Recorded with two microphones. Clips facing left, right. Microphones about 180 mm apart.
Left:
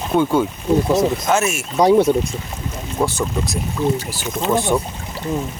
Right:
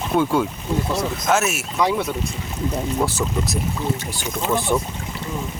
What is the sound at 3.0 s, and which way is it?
Speech, centre (ahead or behind).